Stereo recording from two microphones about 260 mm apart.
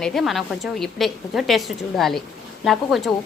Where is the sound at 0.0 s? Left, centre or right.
Centre.